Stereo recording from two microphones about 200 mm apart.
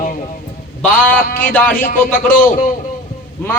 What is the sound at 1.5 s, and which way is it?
Speech, 10° left (ahead or behind).